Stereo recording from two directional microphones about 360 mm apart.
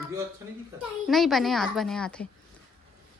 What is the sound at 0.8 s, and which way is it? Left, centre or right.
A woman's voice, centre.